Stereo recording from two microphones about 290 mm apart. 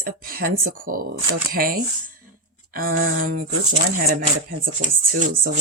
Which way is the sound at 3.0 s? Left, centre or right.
Right.